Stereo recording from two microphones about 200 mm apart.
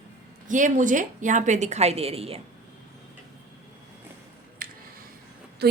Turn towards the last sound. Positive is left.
turn(degrees=-45)  # may be behind; listen again after turning